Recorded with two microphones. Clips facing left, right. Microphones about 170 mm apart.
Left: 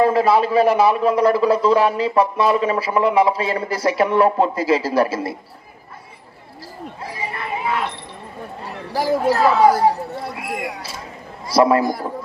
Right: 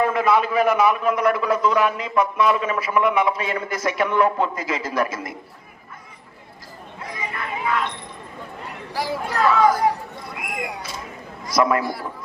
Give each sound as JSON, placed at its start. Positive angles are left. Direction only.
{"t": 0.0, "sound": "a man's voice", "side_deg": 30}
{"t": 7.0, "sound": "chatter", "side_deg": 30}
{"t": 8.6, "sound": "speech", "side_deg": 40}
{"t": 10.3, "sound": "a sound", "side_deg": 30}
{"t": 11.4, "sound": "a man's voice", "side_deg": 30}